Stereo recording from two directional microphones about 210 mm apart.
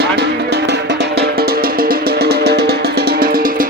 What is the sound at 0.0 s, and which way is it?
Music, 50° right (ahead or behind).